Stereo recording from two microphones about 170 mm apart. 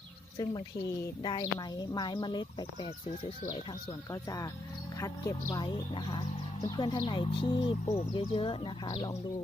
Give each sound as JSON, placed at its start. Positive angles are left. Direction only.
{"t": 0.3, "sound": "speech", "side_deg": 20}